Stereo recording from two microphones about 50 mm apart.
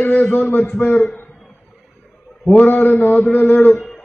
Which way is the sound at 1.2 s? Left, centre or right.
Left.